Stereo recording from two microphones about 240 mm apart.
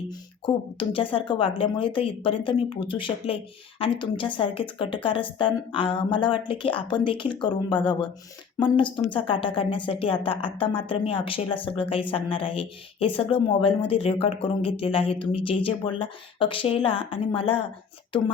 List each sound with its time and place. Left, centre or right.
0.1 s speech: left